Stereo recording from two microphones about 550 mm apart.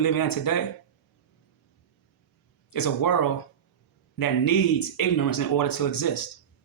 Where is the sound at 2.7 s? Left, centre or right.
Left.